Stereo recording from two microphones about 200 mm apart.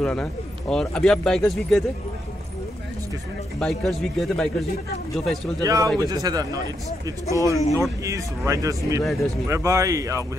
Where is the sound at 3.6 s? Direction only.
Centre (ahead or behind).